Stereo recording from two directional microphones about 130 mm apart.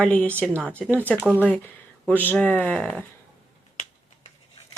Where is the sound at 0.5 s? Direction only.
20° right (ahead or behind).